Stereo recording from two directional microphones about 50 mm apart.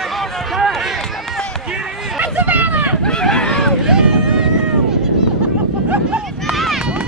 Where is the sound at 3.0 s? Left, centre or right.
Centre.